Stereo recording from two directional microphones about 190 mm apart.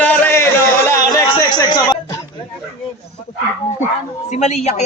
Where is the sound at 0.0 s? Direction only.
10° left (ahead or behind).